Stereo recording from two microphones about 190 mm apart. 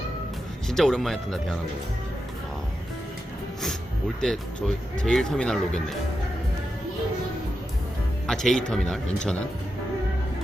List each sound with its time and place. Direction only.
0.7 s speech: centre (ahead or behind)
4.2 s speech: 5° left (ahead or behind)
8.3 s speech: 5° left (ahead or behind)